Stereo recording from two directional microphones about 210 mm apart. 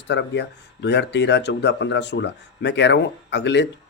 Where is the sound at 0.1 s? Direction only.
55° left (ahead or behind).